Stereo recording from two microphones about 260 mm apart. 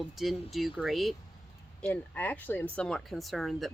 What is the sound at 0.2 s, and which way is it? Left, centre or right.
Speech, centre.